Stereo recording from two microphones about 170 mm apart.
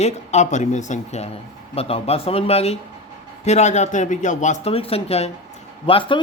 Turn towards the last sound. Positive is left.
turn(degrees=30)  # may be behind; listen again after turning